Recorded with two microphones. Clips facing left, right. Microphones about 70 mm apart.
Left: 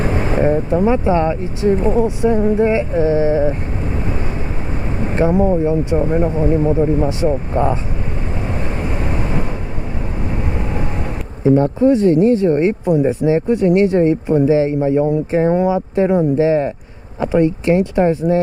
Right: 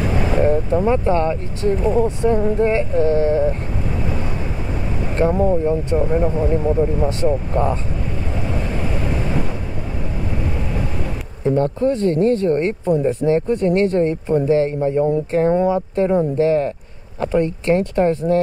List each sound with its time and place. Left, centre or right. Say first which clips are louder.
0.0 s vehicle: left 1 dB; left
0.7 s speech: left 4 dB; centre
5.2 s speech: left 2 dB; centre
7.1 s speech: left 2 dB; centre
11.4 s speech: left 5 dB; left